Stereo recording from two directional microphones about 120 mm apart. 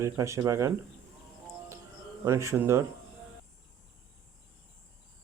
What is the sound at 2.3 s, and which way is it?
Speech, 25° right (ahead or behind).